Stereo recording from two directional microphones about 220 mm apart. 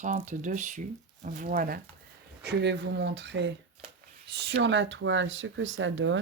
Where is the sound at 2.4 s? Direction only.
50° right (ahead or behind).